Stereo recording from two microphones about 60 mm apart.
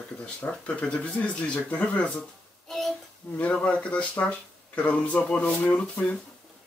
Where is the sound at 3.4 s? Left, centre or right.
Left.